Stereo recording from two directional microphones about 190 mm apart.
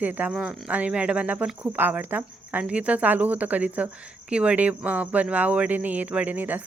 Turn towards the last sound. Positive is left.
turn(degrees=-10)  # may be behind; listen again after turning